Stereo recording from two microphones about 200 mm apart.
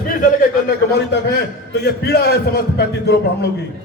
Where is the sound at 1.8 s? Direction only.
55° left (ahead or behind).